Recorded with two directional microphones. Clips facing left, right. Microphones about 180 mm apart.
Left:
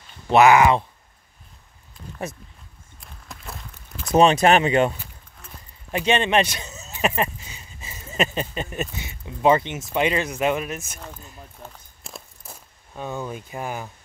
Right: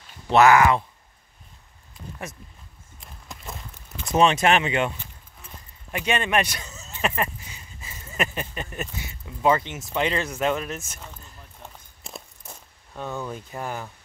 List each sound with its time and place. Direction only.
0.3 s speech: 15° left (ahead or behind)
3.0 s a sound: centre (ahead or behind)
4.1 s speech: 35° left (ahead or behind)
5.9 s speech: 30° left (ahead or behind); by 11.0 s 15° left (ahead or behind)
12.0 s walk: centre (ahead or behind)
12.9 s speech: 10° left (ahead or behind)